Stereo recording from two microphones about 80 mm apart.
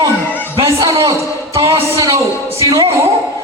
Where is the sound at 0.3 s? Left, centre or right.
Left.